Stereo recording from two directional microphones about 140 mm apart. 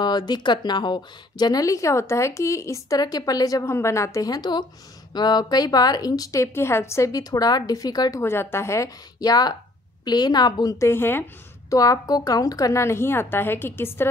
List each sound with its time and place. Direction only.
0.0 s speech: 30° left (ahead or behind)
8.2 s speech: 15° left (ahead or behind)